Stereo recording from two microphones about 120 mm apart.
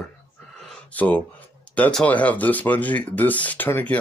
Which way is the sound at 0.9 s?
15° left (ahead or behind).